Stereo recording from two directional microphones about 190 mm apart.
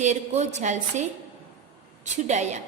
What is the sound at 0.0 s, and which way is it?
A woman's voice, 40° right (ahead or behind).